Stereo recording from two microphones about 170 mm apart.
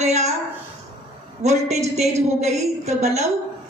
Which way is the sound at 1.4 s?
40° right (ahead or behind).